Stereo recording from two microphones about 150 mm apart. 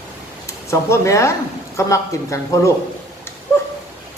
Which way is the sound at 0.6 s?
20° left (ahead or behind).